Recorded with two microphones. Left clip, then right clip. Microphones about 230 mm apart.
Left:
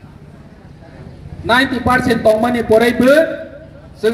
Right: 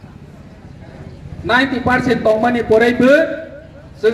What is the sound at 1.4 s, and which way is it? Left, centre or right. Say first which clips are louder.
A man's voice: left 1 dB; left.